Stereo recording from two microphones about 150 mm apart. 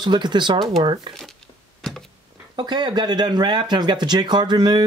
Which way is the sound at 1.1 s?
Centre (ahead or behind).